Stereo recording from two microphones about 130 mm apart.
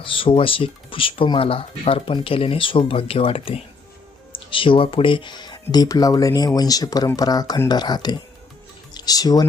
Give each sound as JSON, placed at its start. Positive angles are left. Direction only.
{"t": 0.0, "sound": "speech", "side_deg": 40}